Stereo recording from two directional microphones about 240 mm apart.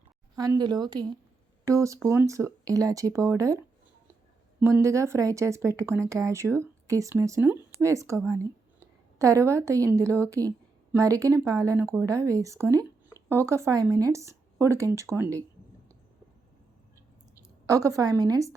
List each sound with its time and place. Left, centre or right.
0.3 s speech: centre
4.6 s a woman's voice: centre
17.7 s speech: centre